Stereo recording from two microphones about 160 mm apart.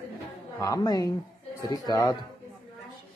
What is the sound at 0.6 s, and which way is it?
Speech, 20° left (ahead or behind).